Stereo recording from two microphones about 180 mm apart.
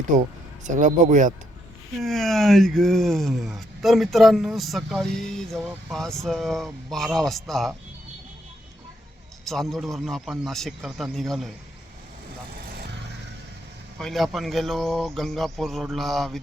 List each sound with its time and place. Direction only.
0.2 s speech: 45° right (ahead or behind)
2.0 s speech: centre (ahead or behind)
9.4 s speech: centre (ahead or behind)
14.0 s speech: centre (ahead or behind)